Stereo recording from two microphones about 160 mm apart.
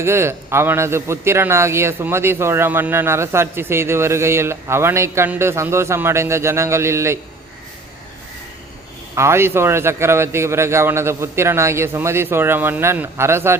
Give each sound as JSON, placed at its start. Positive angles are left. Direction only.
{"t": 0.0, "sound": "a man's voice", "side_deg": -15}
{"t": 9.1, "sound": "a man's voice", "side_deg": -15}